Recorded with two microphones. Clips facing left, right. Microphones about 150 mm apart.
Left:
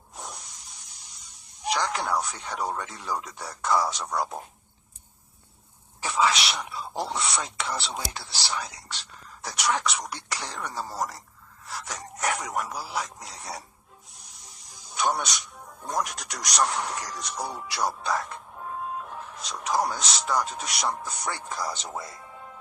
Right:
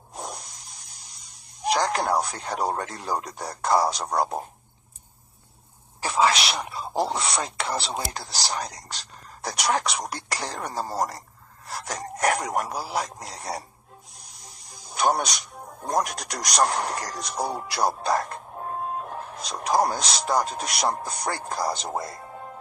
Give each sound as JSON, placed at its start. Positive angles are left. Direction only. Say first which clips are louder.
{"t": 0.1, "sound": "spray", "louder": "right 5 dB", "side_deg": -40}
{"t": 1.8, "sound": "speech", "louder": "right 3 dB", "side_deg": -40}
{"t": 2.8, "sound": "speech", "louder": "right 5 dB", "side_deg": -60}
{"t": 3.2, "sound": "speech", "louder": "right 2 dB", "side_deg": -40}
{"t": 6.0, "sound": "speech", "louder": "right 3 dB", "side_deg": -45}
{"t": 11.6, "sound": "a sound", "louder": "right 2 dB", "side_deg": -35}
{"t": 11.9, "sound": "speech", "louder": "right 6 dB", "side_deg": -65}
{"t": 13.2, "sound": "speech", "louder": "right 5 dB", "side_deg": -45}
{"t": 14.7, "sound": "snake", "louder": "right 4 dB", "side_deg": -35}
{"t": 16.0, "sound": "speech", "louder": "right 4 dB", "side_deg": -35}
{"t": 17.7, "sound": "music", "louder": "right 3 dB", "side_deg": -40}
{"t": 19.4, "sound": "speech", "louder": "right 4 dB", "side_deg": -35}